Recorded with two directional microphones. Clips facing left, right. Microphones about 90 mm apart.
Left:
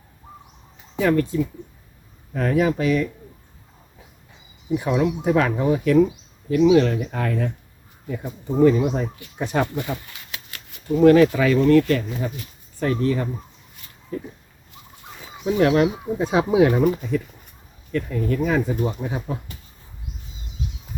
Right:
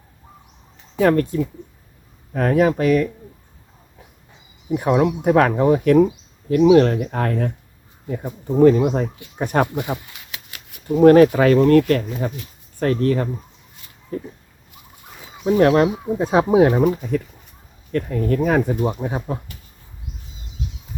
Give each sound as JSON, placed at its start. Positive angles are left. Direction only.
{"t": 1.0, "sound": "speech", "side_deg": -55}
{"t": 4.7, "sound": "speech", "side_deg": -50}
{"t": 9.7, "sound": "speech", "side_deg": -15}
{"t": 10.8, "sound": "speech", "side_deg": -50}
{"t": 15.4, "sound": "speech", "side_deg": -45}
{"t": 17.9, "sound": "speech", "side_deg": -50}